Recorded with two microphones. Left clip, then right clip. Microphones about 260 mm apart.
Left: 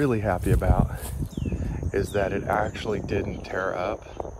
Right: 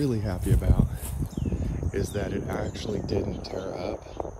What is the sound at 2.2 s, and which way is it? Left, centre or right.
Speech, centre.